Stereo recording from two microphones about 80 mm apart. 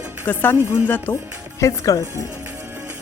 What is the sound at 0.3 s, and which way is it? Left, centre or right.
Speech, left.